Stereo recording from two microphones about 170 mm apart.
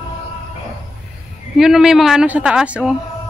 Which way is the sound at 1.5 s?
5° right (ahead or behind).